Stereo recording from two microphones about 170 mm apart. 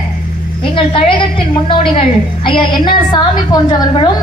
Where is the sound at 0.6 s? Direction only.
30° left (ahead or behind).